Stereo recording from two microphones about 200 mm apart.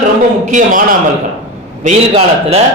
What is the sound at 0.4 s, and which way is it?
A man's voice, 40° right (ahead or behind).